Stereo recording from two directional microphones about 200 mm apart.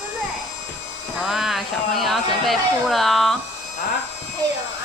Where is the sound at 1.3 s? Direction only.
Centre (ahead or behind).